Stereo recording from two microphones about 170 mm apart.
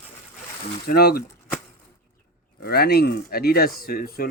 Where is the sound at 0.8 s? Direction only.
65° left (ahead or behind).